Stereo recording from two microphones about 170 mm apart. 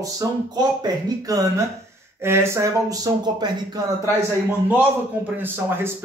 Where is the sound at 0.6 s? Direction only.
25° right (ahead or behind).